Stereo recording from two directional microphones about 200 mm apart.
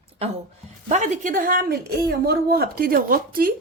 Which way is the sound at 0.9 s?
35° right (ahead or behind).